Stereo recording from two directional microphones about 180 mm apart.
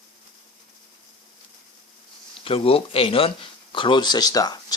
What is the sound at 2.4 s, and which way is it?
Speech, 30° left (ahead or behind).